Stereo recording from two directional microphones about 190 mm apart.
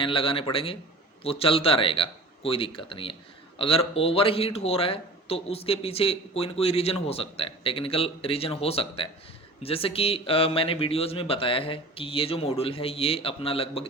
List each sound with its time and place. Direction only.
0.0 s a man's voice: 30° left (ahead or behind)